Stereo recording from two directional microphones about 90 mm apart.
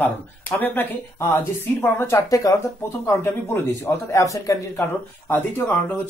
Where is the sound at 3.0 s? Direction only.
30° left (ahead or behind).